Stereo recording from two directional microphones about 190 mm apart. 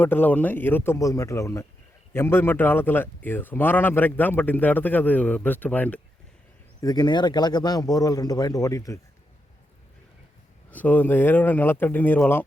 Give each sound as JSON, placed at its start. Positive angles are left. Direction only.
{"t": 0.0, "sound": "speech", "side_deg": 10}
{"t": 6.8, "sound": "speech", "side_deg": 20}
{"t": 10.7, "sound": "speech", "side_deg": 10}